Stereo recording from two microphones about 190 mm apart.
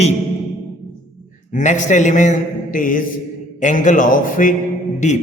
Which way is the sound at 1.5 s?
40° left (ahead or behind).